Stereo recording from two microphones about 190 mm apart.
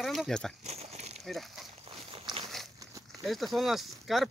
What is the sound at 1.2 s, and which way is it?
Speech, centre (ahead or behind).